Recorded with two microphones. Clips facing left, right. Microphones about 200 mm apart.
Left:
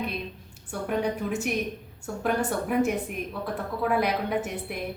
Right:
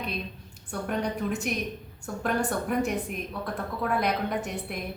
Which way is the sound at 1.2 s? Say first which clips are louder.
Left 1 dB; 5° left (ahead or behind).